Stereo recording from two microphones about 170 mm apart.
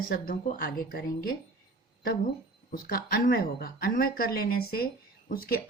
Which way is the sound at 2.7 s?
60° left (ahead or behind).